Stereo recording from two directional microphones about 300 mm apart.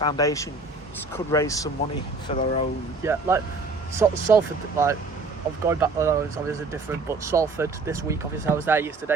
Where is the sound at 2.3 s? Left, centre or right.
Left.